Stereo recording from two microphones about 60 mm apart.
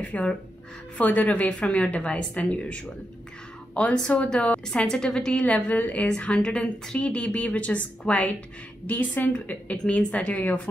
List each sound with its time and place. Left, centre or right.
0.0 s a sound: left
0.9 s a woman's voice: left
5.4 s a woman's voice: left